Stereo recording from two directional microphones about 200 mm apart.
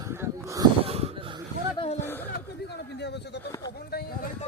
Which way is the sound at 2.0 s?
10° left (ahead or behind).